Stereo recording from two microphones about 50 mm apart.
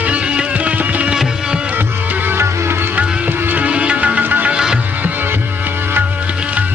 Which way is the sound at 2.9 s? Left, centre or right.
Right.